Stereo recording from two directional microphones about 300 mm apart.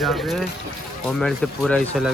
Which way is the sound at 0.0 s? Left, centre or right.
Centre.